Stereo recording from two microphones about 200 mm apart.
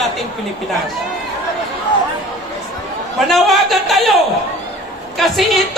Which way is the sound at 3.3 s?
Centre (ahead or behind).